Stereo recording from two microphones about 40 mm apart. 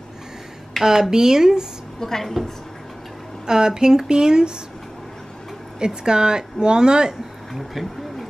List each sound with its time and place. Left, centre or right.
0.8 s speech: centre
2.0 s a woman's voice: centre
3.4 s speech: centre
5.8 s a woman's voice: centre
7.5 s speech: centre